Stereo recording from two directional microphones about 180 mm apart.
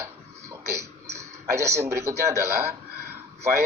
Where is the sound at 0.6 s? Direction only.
15° right (ahead or behind).